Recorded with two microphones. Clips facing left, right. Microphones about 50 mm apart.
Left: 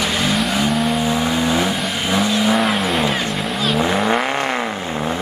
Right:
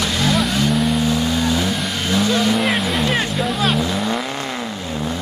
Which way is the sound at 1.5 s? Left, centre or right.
Left.